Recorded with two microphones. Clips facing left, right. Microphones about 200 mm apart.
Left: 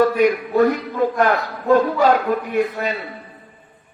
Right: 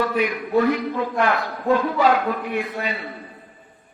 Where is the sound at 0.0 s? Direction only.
45° left (ahead or behind).